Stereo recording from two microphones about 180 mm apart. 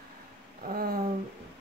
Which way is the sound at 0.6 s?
55° right (ahead or behind).